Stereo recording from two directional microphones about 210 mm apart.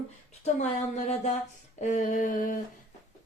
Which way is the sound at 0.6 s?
35° left (ahead or behind).